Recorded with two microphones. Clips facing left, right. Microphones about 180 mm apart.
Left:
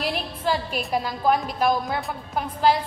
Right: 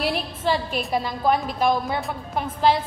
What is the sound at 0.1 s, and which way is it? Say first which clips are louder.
A woman's voice: right 2 dB; 5° left (ahead or behind).